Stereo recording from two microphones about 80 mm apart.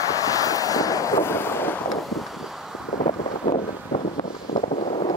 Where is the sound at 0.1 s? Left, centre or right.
Left.